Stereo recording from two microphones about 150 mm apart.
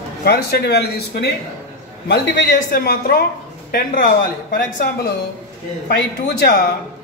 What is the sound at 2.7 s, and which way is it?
A woman's voice, 80° left.